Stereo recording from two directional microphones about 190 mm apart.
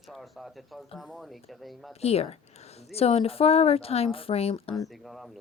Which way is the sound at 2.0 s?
30° left (ahead or behind).